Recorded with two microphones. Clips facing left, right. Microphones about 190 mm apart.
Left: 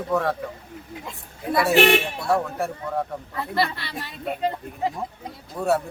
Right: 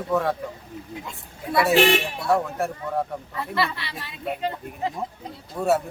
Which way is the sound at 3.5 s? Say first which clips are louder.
Left 2 dB; 40° left (ahead or behind).